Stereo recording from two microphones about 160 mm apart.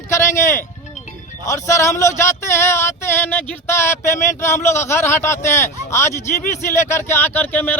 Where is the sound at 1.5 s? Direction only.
20° left (ahead or behind).